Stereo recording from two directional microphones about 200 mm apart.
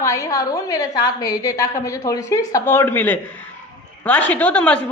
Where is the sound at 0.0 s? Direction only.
15° left (ahead or behind).